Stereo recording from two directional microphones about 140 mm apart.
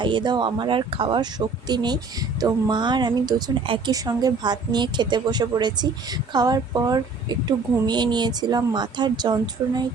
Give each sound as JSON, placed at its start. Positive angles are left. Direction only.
{"t": 0.0, "sound": "speech", "side_deg": -35}